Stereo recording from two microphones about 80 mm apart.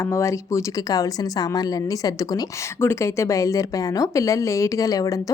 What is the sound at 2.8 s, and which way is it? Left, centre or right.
A woman's voice, left.